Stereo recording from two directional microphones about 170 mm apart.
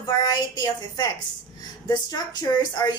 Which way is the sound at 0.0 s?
25° left (ahead or behind).